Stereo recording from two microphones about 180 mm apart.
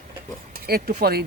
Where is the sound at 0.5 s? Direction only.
55° right (ahead or behind).